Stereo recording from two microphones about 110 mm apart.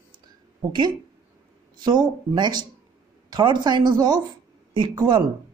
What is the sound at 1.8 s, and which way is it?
Speech, 40° right (ahead or behind).